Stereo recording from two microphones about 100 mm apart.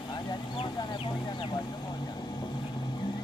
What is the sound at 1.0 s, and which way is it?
Vehicle, 45° left (ahead or behind).